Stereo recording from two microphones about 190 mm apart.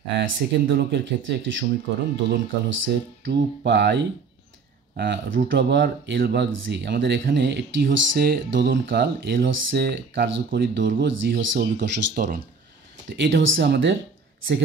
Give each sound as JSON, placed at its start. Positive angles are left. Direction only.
{"t": 0.2, "sound": "speech", "side_deg": -65}
{"t": 13.1, "sound": "speech", "side_deg": -70}